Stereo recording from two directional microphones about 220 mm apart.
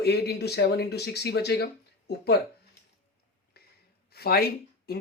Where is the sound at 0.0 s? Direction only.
50° left (ahead or behind).